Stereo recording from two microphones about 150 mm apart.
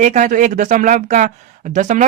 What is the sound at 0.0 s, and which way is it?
Speech, 55° right (ahead or behind).